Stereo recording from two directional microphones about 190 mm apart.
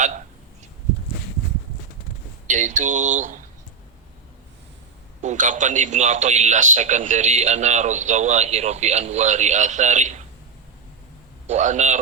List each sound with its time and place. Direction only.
2.5 s a man's voice: 40° right (ahead or behind)
5.2 s a man's voice: 40° right (ahead or behind)
11.4 s a man's voice: 40° right (ahead or behind)